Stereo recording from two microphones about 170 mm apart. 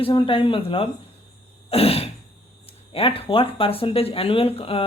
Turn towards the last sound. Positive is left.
turn(degrees=35)  # may be behind; listen again after turning